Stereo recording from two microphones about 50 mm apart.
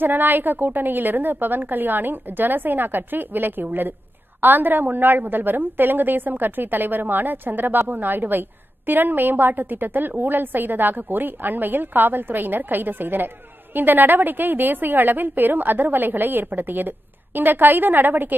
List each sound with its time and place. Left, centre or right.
0.0 s a woman's voice: right